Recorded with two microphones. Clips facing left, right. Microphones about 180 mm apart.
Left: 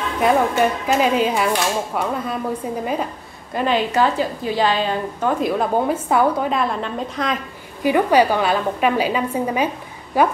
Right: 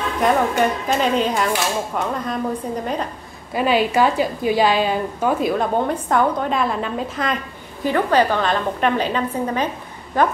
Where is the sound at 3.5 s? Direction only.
10° right (ahead or behind).